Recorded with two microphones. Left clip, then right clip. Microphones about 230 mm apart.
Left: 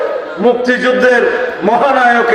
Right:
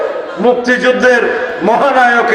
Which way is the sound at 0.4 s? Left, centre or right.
Right.